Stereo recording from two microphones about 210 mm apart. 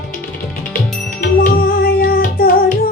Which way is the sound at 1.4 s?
45° left (ahead or behind).